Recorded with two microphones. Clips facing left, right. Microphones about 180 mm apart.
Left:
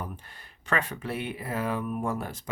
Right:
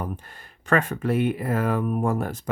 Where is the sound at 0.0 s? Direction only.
50° right (ahead or behind).